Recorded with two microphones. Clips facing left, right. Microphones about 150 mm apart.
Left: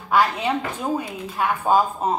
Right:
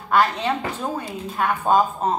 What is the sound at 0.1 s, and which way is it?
Speech, 10° left (ahead or behind).